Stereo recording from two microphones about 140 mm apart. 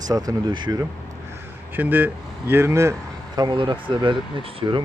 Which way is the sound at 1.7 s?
15° right (ahead or behind).